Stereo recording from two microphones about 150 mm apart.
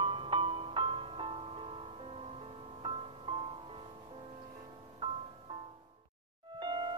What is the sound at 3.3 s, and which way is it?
Music, 35° right (ahead or behind).